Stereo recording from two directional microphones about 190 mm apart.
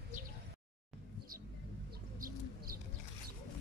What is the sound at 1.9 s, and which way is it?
Bird, 50° right (ahead or behind).